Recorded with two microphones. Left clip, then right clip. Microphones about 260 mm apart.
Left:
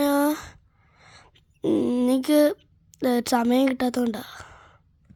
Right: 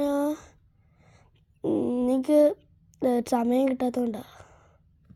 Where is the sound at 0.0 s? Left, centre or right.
Left.